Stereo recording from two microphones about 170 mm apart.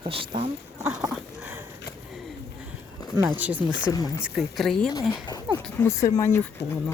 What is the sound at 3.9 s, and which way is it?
Speech, 20° left (ahead or behind).